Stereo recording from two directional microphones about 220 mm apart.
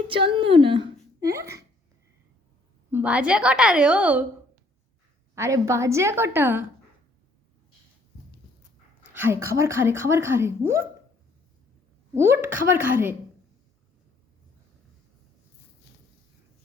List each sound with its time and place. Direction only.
0.1 s a woman's voice: 25° right (ahead or behind)
1.2 s a woman's voice: 15° right (ahead or behind)
2.9 s a woman's voice: 5° right (ahead or behind)
5.3 s a woman's voice: 15° right (ahead or behind)
9.1 s a woman's voice: 10° right (ahead or behind)
12.1 s a woman's voice: 10° right (ahead or behind)